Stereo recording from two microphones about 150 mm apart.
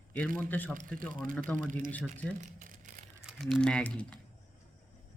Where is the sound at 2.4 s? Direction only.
60° right (ahead or behind).